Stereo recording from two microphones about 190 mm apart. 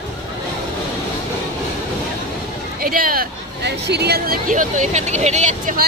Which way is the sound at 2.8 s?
50° right (ahead or behind).